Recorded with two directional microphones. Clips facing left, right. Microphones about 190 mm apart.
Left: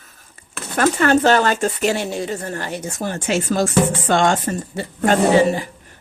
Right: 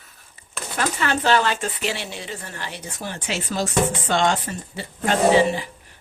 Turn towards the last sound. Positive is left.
turn(degrees=45)  # may be behind; listen again after turning